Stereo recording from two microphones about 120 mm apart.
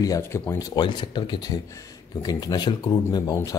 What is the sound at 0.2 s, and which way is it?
Speech, 25° left (ahead or behind).